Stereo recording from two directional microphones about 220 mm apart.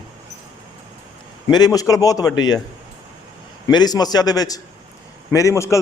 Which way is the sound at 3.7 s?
20° left (ahead or behind).